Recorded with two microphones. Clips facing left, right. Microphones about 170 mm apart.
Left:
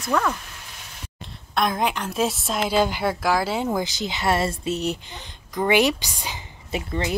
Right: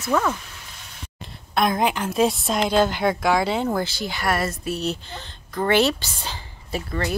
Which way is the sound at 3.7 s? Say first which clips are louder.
Even; 15° left (ahead or behind).